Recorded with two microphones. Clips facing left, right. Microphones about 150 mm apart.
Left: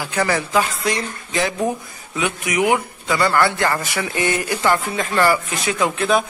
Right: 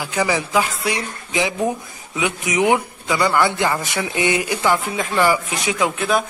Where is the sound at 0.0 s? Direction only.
15° right (ahead or behind).